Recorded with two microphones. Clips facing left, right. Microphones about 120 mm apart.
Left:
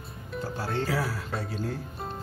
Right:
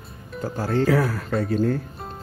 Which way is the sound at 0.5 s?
50° right (ahead or behind).